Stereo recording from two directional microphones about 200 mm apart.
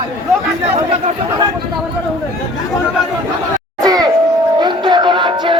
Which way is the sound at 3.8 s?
20° right (ahead or behind).